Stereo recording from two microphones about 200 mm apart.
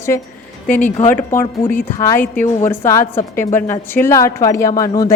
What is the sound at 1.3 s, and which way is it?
Speech, 10° left (ahead or behind).